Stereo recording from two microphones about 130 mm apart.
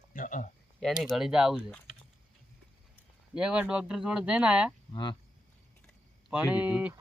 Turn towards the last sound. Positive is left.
turn(degrees=-10)  # may be behind; listen again after turning